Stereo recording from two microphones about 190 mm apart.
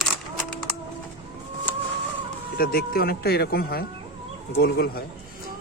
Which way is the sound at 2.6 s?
50° left (ahead or behind).